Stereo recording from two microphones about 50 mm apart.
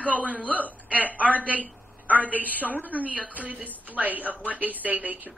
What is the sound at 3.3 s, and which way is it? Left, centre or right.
Speech, right.